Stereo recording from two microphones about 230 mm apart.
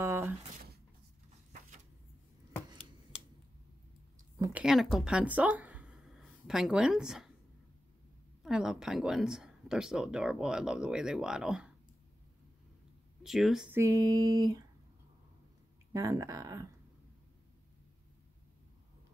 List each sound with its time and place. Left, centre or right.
0.0 s a sound: centre
4.4 s speech: centre
8.4 s speech: centre
13.2 s speech: centre
15.9 s speech: centre